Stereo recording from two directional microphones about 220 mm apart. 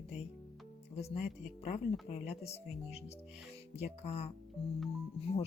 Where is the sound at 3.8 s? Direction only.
30° left (ahead or behind).